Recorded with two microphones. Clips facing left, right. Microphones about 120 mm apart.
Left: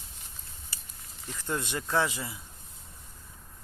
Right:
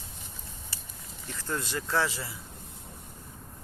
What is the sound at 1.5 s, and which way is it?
Speech, 20° left (ahead or behind).